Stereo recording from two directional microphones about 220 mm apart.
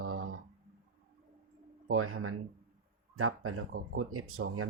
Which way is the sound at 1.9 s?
75° right (ahead or behind).